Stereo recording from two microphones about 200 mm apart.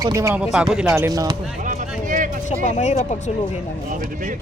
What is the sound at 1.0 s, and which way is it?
Speech, 15° right (ahead or behind).